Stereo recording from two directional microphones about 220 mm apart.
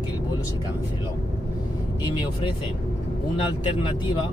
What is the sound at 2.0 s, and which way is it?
Speech, 20° left (ahead or behind).